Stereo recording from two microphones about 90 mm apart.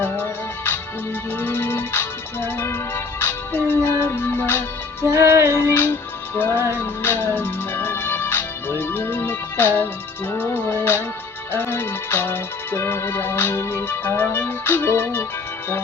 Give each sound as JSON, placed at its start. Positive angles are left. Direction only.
{"t": 0.0, "sound": "music", "side_deg": 25}
{"t": 5.0, "sound": "music", "side_deg": -30}
{"t": 6.3, "sound": "music", "side_deg": 25}